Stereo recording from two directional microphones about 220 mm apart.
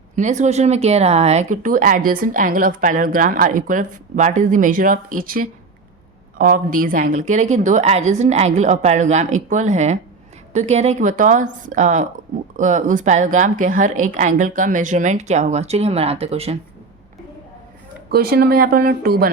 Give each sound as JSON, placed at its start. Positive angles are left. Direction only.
{"t": 0.2, "sound": "speech", "side_deg": -30}
{"t": 18.1, "sound": "speech", "side_deg": -45}